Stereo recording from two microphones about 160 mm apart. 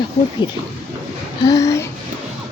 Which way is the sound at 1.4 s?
20° left (ahead or behind).